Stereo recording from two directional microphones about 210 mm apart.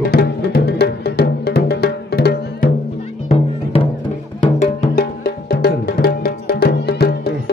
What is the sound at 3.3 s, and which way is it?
Music, 25° left (ahead or behind).